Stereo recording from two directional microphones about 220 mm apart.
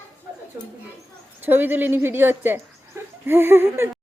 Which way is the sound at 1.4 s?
10° right (ahead or behind).